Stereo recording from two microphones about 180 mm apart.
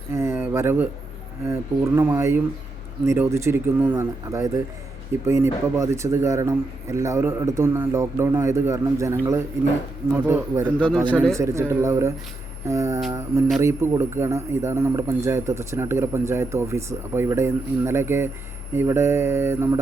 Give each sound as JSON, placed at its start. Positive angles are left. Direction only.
{"t": 0.1, "sound": "a sound", "side_deg": -15}
{"t": 1.5, "sound": "speech", "side_deg": -15}
{"t": 10.7, "sound": "speech", "side_deg": 5}
{"t": 11.3, "sound": "speech", "side_deg": -15}